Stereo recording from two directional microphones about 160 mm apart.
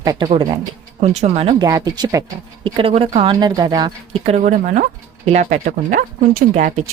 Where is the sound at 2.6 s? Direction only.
35° right (ahead or behind).